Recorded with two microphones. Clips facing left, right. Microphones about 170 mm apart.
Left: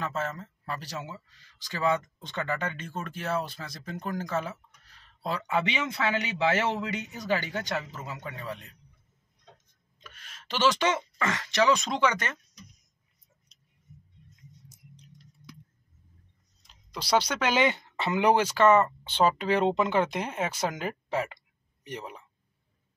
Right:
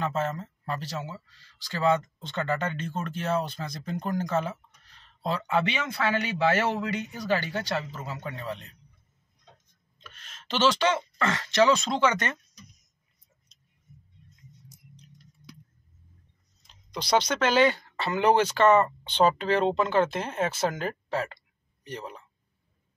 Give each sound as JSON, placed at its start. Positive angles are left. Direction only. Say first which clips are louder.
{"t": 0.0, "sound": "speech", "louder": "right 4 dB", "side_deg": 5}
{"t": 9.9, "sound": "speech", "louder": "even", "side_deg": 10}
{"t": 16.9, "sound": "speech", "louder": "right 1 dB", "side_deg": 5}